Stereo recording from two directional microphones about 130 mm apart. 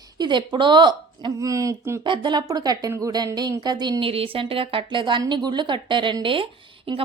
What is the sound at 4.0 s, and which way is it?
Speech, 45° right (ahead or behind).